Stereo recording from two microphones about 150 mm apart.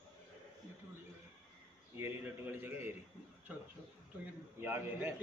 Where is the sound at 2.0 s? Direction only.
15° right (ahead or behind).